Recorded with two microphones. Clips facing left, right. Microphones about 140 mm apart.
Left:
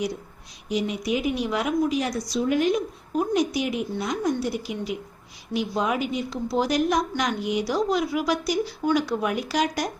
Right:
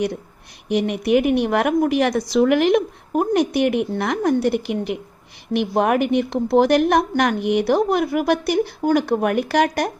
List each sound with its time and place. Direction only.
0.7 s a woman's voice: 65° right (ahead or behind)